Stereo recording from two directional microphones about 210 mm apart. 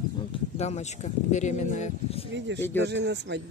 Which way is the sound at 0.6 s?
30° left (ahead or behind).